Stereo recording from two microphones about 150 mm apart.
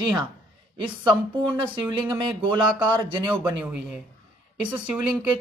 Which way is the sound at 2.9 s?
30° right (ahead or behind).